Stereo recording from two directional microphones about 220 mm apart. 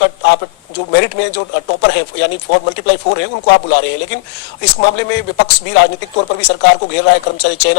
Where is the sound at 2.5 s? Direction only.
55° left (ahead or behind).